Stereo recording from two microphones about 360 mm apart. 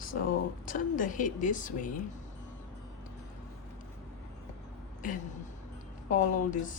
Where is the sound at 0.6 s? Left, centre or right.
Left.